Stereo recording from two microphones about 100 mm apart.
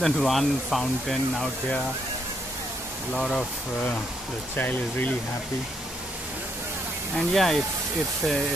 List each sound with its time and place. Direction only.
0.0 s speech: centre (ahead or behind)
3.1 s speech: centre (ahead or behind)
4.6 s speech: 20° left (ahead or behind)
7.2 s speech: centre (ahead or behind)